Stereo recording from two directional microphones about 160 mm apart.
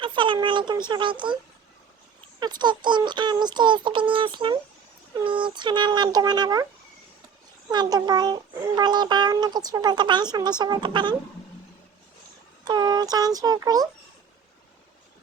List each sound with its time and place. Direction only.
0.0 s speech: 30° right (ahead or behind)
2.4 s a child's voice: 25° right (ahead or behind)
7.7 s a child's voice: 25° right (ahead or behind)
12.6 s a child's voice: 25° right (ahead or behind)